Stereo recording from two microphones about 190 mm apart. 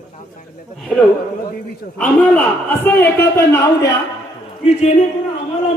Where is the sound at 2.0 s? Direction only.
5° left (ahead or behind).